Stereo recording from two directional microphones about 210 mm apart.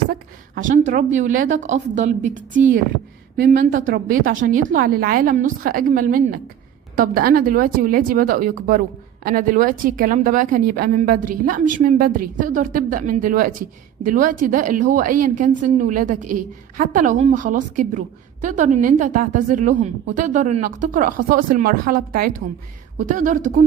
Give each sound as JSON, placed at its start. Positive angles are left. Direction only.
{"t": 0.1, "sound": "a woman's voice", "side_deg": -40}